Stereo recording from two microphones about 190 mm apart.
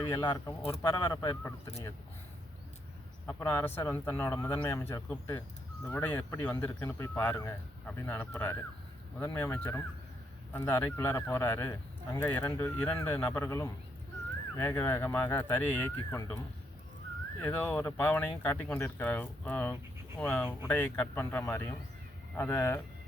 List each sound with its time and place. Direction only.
0.0 s speech: 20° left (ahead or behind)
3.2 s speech: 10° left (ahead or behind)
17.4 s speech: 10° left (ahead or behind)